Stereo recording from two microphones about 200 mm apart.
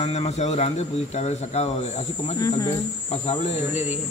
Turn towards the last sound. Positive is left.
turn(degrees=35)  # may be behind; listen again after turning